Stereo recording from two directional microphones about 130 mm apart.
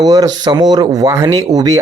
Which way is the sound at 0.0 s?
30° right (ahead or behind).